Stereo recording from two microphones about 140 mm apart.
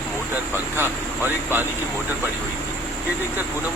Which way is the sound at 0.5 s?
15° right (ahead or behind).